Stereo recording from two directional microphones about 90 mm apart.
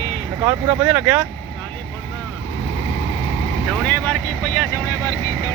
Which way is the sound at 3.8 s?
10° left (ahead or behind).